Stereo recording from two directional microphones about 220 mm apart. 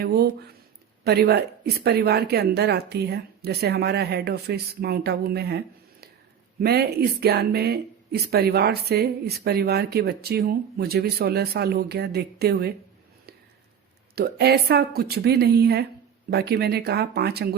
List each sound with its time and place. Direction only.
0.0 s speech: 45° right (ahead or behind)
14.2 s speech: 45° right (ahead or behind)